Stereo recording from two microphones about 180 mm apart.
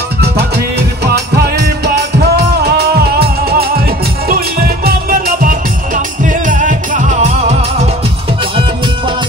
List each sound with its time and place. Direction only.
0.2 s music: 65° right (ahead or behind); by 7.3 s 45° right (ahead or behind)